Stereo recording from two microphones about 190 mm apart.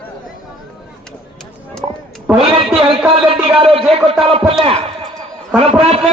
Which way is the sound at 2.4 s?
30° right (ahead or behind).